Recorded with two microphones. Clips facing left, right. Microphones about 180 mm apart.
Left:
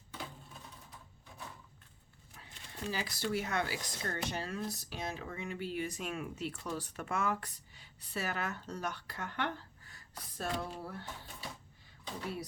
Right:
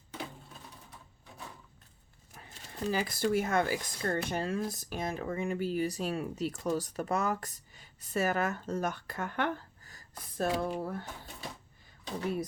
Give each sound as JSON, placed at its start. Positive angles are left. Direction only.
{"t": 2.3, "sound": "speech", "side_deg": -45}